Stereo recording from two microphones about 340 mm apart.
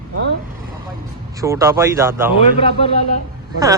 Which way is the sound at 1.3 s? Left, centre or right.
Centre.